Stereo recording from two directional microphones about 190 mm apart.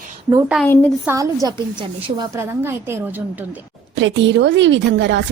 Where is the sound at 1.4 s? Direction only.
20° right (ahead or behind).